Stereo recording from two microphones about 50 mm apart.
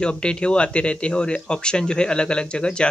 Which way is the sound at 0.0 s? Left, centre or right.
Centre.